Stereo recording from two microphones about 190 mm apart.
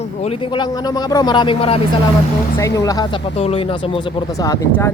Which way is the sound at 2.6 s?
15° left (ahead or behind).